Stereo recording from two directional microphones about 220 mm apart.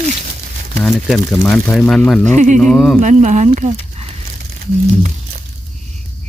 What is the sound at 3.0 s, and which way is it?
Speech, 35° right (ahead or behind).